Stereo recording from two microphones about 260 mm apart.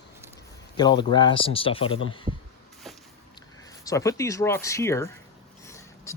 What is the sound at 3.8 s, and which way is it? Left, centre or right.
Speech, centre.